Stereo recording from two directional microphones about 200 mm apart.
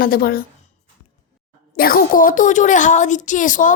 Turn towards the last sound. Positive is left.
turn(degrees=40)  # may be behind; listen again after turning